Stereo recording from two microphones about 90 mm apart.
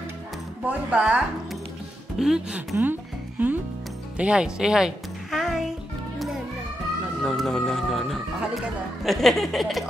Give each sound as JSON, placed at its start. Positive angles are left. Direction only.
{"t": 0.7, "sound": "a woman's voice", "side_deg": -15}
{"t": 2.8, "sound": "speech", "side_deg": -20}
{"t": 4.2, "sound": "music", "side_deg": -10}
{"t": 7.2, "sound": "speech", "side_deg": 0}